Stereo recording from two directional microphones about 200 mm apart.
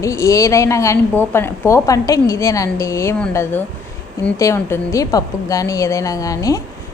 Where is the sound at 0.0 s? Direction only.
15° left (ahead or behind).